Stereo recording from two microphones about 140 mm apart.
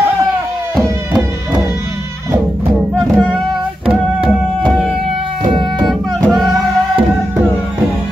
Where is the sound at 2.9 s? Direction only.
5° left (ahead or behind).